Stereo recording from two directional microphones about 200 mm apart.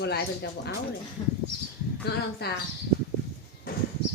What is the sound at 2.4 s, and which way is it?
Speech, 55° left (ahead or behind).